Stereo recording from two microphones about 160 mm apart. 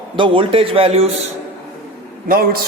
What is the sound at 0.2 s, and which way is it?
Speech, 35° right (ahead or behind).